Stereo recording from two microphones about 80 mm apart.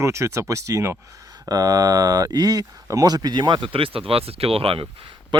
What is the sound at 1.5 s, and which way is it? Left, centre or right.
Speech, right.